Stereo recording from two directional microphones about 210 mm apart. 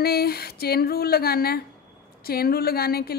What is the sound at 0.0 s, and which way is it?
A woman's voice, 50° left (ahead or behind).